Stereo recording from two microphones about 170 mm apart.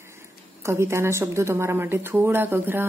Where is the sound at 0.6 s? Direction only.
15° right (ahead or behind).